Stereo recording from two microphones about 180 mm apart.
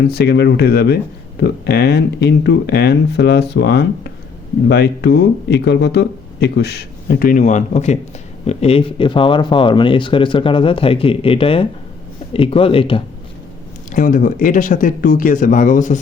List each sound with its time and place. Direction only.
0.1 s speech: 65° left (ahead or behind); by 13.0 s 30° left (ahead or behind)
13.9 s speech: 50° left (ahead or behind)